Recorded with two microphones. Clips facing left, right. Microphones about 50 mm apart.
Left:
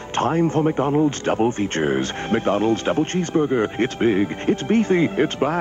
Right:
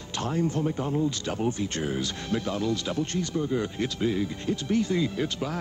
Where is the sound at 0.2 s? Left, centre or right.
Left.